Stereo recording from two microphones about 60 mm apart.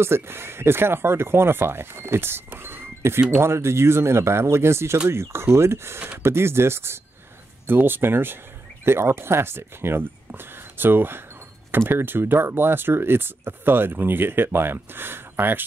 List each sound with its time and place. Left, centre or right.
0.0 s speech: right